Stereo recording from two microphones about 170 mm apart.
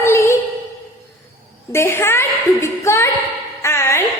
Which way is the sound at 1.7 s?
15° left (ahead or behind).